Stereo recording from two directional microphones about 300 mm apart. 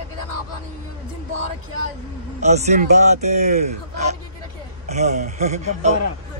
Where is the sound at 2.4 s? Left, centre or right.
Right.